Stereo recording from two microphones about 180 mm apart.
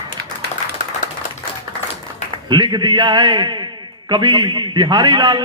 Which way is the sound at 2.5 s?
25° right (ahead or behind).